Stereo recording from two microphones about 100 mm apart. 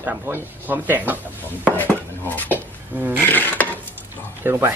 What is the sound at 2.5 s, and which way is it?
Speech, 20° right (ahead or behind).